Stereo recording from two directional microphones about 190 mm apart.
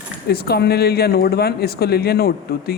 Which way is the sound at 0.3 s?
55° left (ahead or behind).